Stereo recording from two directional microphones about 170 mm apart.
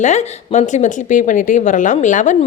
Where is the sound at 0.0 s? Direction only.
45° left (ahead or behind).